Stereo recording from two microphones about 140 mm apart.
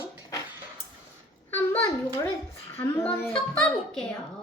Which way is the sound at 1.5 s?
10° left (ahead or behind).